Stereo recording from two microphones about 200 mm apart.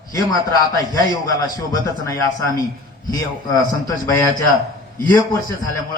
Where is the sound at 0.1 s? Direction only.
20° left (ahead or behind).